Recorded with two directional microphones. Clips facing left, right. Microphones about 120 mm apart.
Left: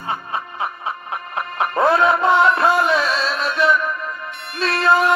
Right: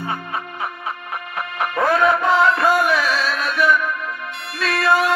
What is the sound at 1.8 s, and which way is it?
Music, 25° left (ahead or behind).